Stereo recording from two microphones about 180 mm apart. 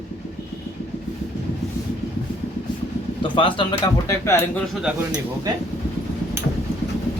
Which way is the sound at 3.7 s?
15° left (ahead or behind).